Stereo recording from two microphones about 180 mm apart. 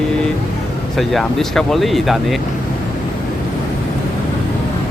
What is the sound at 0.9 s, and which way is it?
Speech, centre (ahead or behind).